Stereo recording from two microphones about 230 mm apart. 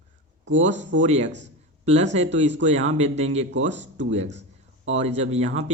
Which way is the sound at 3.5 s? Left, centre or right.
Right.